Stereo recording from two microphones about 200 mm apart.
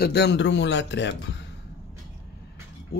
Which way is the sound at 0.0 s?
55° left (ahead or behind).